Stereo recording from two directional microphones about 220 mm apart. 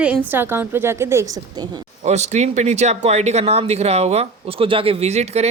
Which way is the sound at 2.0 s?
30° right (ahead or behind).